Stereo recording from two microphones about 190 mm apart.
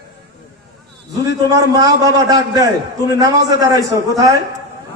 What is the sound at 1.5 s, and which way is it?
A man's voice, 20° right (ahead or behind).